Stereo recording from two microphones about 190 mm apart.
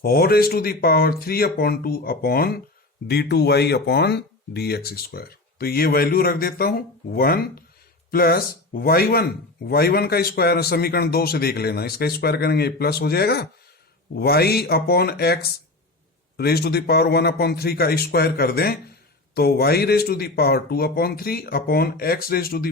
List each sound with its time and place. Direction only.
0.0 s a man's voice: 55° left (ahead or behind)